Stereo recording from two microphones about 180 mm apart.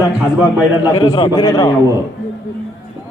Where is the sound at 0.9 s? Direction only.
25° left (ahead or behind).